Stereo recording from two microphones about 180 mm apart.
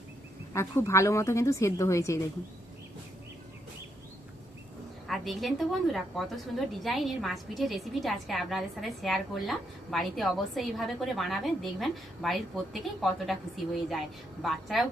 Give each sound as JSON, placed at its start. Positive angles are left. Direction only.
{"t": 0.5, "sound": "a woman's voice", "side_deg": 15}
{"t": 5.0, "sound": "a woman's voice", "side_deg": 0}